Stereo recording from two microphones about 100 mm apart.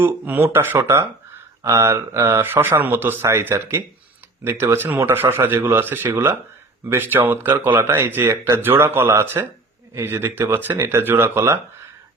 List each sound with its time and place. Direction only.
0.0 s speech: 20° right (ahead or behind)